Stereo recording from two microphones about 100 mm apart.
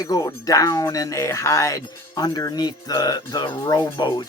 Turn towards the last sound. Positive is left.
turn(degrees=40)  # may be behind; listen again after turning